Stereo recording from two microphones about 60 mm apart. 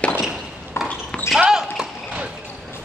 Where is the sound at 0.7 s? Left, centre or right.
Left.